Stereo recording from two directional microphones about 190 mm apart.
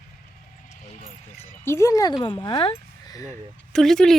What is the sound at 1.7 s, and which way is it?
Speech, 15° left (ahead or behind).